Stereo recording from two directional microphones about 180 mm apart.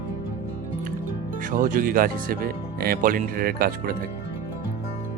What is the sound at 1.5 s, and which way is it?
Speech, 45° right (ahead or behind).